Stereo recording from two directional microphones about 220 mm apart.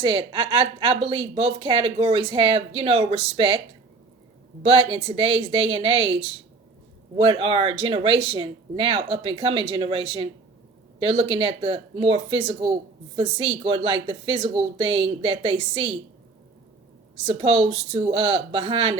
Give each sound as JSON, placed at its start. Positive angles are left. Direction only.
{"t": 0.0, "sound": "speech", "side_deg": -25}
{"t": 4.6, "sound": "speech", "side_deg": -25}
{"t": 17.2, "sound": "speech", "side_deg": -25}